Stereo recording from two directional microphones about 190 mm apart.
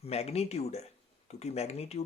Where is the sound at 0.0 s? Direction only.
35° left (ahead or behind).